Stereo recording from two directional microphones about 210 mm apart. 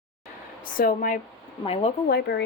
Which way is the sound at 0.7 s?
40° left (ahead or behind).